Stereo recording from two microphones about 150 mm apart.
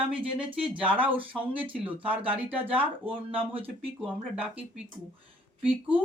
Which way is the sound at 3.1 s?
35° right (ahead or behind).